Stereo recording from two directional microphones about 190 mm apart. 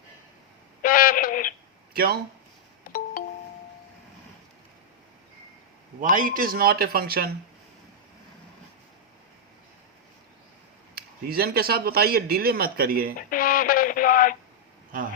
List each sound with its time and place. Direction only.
0.8 s a sound: 50° left (ahead or behind)
1.9 s a sound: 50° right (ahead or behind)
3.2 s music: 50° left (ahead or behind)
6.0 s speech: 45° right (ahead or behind)
10.9 s speech: 55° right (ahead or behind)
13.3 s radio: 45° left (ahead or behind)